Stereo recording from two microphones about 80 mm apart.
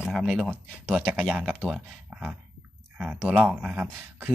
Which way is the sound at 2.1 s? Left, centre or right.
Centre.